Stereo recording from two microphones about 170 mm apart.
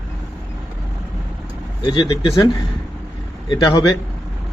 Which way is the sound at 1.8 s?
25° left (ahead or behind).